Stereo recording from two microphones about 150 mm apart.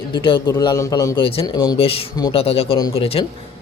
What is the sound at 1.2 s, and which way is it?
Speech, 40° left (ahead or behind).